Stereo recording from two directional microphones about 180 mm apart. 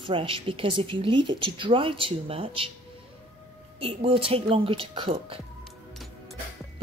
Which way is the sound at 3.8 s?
30° right (ahead or behind).